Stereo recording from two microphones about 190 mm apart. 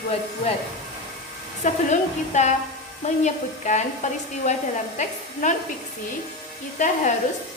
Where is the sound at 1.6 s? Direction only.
40° left (ahead or behind).